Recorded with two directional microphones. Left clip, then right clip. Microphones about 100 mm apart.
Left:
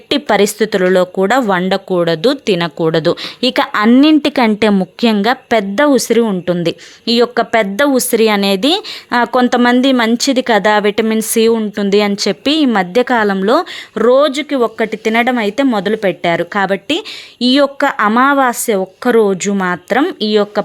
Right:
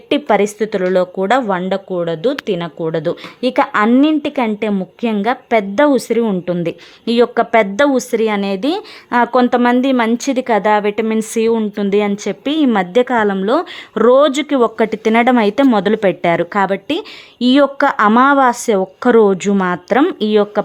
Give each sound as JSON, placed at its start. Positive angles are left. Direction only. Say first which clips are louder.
{"t": 0.1, "sound": "a sound", "louder": "left 1 dB", "side_deg": 25}
{"t": 0.6, "sound": "speech", "louder": "left 3 dB", "side_deg": 15}
{"t": 3.4, "sound": "a woman's voice", "louder": "left 1 dB", "side_deg": 15}
{"t": 5.1, "sound": "a woman's voice", "louder": "even", "side_deg": 20}
{"t": 13.2, "sound": "a woman's voice", "louder": "left 3 dB", "side_deg": 15}
{"t": 13.9, "sound": "speech", "louder": "even", "side_deg": -15}
{"t": 15.7, "sound": "speech", "louder": "right 1 dB", "side_deg": -5}
{"t": 19.6, "sound": "speech", "louder": "even", "side_deg": 0}